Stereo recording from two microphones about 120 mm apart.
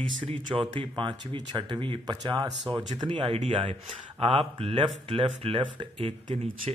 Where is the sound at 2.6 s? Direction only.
45° right (ahead or behind).